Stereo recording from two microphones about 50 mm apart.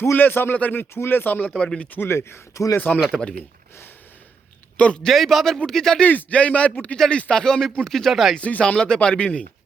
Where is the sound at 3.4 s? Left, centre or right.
Left.